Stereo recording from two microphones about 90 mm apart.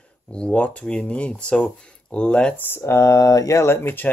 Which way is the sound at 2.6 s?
25° left (ahead or behind).